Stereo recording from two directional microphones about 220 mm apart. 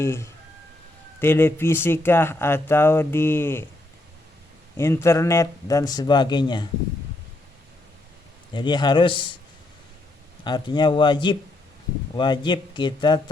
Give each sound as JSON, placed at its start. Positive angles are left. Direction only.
{"t": 0.0, "sound": "speech", "side_deg": 10}
{"t": 4.8, "sound": "speech", "side_deg": 10}
{"t": 8.5, "sound": "a man's voice", "side_deg": 20}
{"t": 10.4, "sound": "a man's voice", "side_deg": 20}